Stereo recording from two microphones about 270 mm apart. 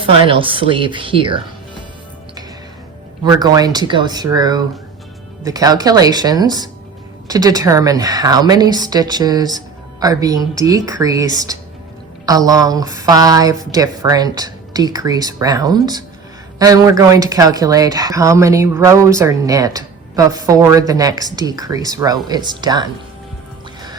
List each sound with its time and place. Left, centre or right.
0.0 s speech: centre
3.2 s speech: centre